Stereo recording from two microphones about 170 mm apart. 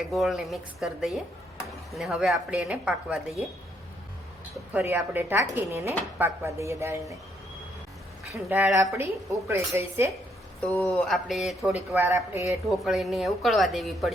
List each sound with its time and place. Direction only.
0.1 s a woman's voice: centre (ahead or behind)
4.7 s a woman's voice: 10° right (ahead or behind)
8.4 s a woman's voice: 10° right (ahead or behind)
10.6 s a woman's voice: 5° left (ahead or behind)
11.9 s a woman's voice: 15° right (ahead or behind)
12.5 s a woman's voice: centre (ahead or behind)